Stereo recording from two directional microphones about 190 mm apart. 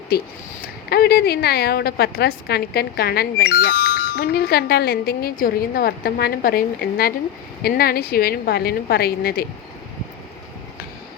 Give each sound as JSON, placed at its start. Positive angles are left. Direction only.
{"t": 0.6, "sound": "a woman's voice", "side_deg": 55}